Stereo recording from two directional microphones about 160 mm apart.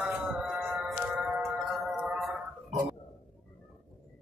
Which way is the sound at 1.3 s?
Centre (ahead or behind).